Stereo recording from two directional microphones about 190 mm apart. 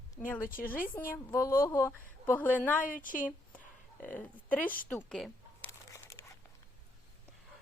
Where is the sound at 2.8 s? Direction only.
45° left (ahead or behind).